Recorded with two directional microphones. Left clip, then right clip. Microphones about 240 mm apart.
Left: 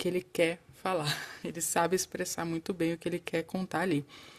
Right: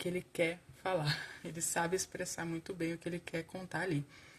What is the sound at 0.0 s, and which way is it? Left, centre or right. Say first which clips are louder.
Speech: left 6 dB; left.